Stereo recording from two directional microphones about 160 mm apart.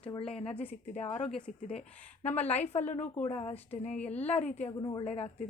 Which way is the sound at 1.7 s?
40° left (ahead or behind).